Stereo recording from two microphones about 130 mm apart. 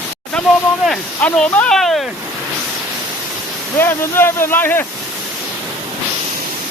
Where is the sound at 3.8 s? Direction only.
15° left (ahead or behind).